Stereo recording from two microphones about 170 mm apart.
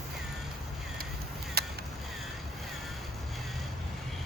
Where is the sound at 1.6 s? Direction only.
65° right (ahead or behind).